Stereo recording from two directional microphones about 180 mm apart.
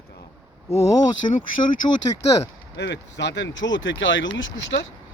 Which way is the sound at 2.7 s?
75° left (ahead or behind).